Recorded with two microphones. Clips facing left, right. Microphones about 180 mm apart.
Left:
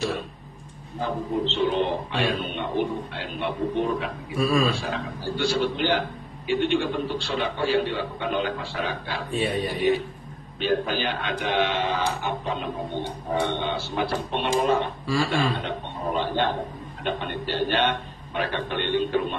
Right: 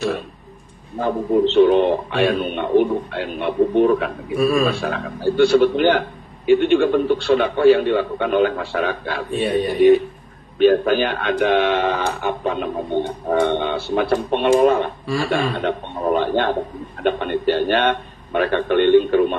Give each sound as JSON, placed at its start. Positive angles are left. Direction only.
{"t": 1.0, "sound": "a man's voice", "side_deg": -55}